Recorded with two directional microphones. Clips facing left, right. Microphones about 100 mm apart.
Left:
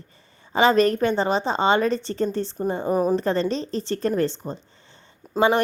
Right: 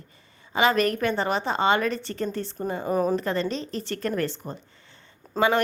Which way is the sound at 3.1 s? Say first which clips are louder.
Left 4 dB; 30° left (ahead or behind).